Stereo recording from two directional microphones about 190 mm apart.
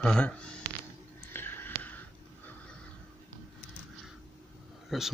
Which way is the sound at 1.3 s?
10° left (ahead or behind).